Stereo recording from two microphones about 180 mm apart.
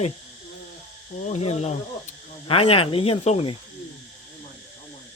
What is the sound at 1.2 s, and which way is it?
Speech, 35° left (ahead or behind).